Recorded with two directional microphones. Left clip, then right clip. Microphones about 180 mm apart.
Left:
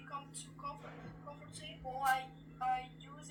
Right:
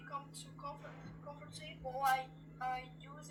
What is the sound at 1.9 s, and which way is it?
Music, 40° right (ahead or behind).